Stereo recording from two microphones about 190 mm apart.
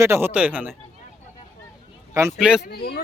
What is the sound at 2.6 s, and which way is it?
Speech, 55° left (ahead or behind).